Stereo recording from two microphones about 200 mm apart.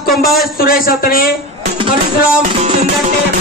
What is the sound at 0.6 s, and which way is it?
Speech, 50° left (ahead or behind).